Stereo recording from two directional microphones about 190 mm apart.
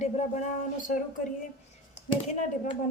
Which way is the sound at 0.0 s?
40° left (ahead or behind).